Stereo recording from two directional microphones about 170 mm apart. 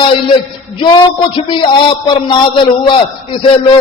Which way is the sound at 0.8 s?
30° left (ahead or behind).